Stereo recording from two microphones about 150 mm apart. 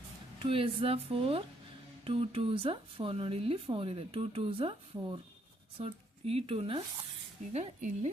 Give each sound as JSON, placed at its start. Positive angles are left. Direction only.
{"t": 0.3, "sound": "a woman's voice", "side_deg": -35}
{"t": 7.5, "sound": "speech", "side_deg": -50}